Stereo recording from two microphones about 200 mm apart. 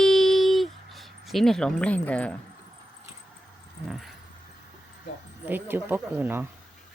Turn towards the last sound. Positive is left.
turn(degrees=-10)  # may be behind; listen again after turning